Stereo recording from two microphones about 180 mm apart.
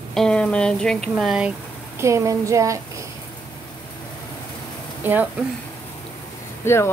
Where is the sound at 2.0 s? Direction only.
15° right (ahead or behind).